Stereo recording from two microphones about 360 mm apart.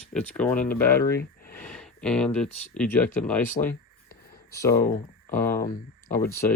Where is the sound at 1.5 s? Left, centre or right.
Centre.